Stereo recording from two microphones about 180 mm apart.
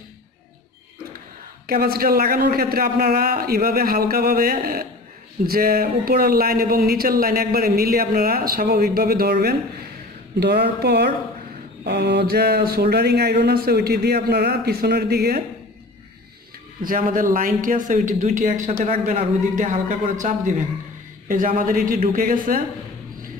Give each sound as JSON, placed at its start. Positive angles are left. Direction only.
{"t": 1.7, "sound": "speech", "side_deg": -55}
{"t": 16.8, "sound": "speech", "side_deg": -50}